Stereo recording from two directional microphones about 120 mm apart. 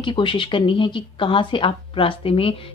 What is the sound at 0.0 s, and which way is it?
Speech, 45° left (ahead or behind).